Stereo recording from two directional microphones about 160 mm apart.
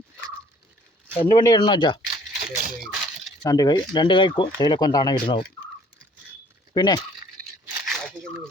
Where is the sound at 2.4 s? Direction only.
60° right (ahead or behind).